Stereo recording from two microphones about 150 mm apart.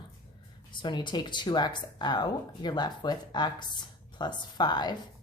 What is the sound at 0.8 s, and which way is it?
Speech, 30° left (ahead or behind).